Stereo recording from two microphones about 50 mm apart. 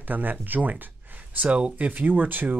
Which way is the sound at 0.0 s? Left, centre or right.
Right.